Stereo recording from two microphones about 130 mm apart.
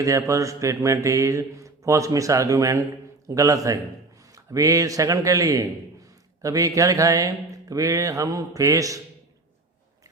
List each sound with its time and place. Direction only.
0.0 s speech: 25° right (ahead or behind)